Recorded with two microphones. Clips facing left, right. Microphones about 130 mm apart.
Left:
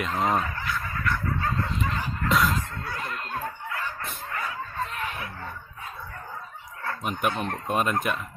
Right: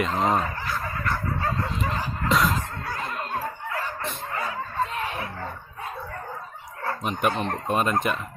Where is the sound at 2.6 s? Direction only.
40° right (ahead or behind).